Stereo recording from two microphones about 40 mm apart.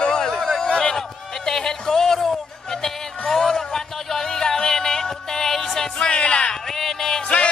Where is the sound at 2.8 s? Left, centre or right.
Centre.